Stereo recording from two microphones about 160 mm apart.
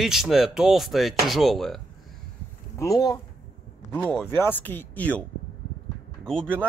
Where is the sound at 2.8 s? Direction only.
20° left (ahead or behind).